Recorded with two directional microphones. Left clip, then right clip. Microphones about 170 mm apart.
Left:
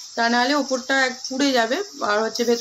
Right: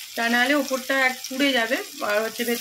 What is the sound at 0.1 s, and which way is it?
Speech, 10° left (ahead or behind).